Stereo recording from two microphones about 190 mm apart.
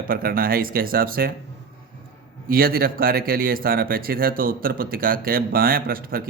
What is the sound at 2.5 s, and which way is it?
A man's voice, 50° right (ahead or behind).